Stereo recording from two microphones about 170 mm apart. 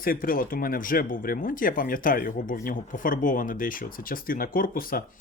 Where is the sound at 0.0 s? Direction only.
55° left (ahead or behind).